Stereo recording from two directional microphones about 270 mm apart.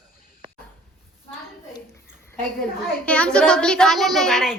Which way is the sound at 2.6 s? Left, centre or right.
Centre.